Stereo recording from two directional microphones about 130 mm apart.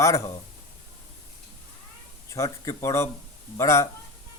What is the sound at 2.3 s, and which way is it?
A man's voice, 25° left (ahead or behind).